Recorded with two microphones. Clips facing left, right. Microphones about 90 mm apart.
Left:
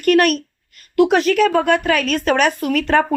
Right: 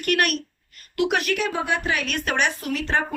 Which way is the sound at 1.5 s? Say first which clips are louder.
Left 9 dB; 60° left (ahead or behind).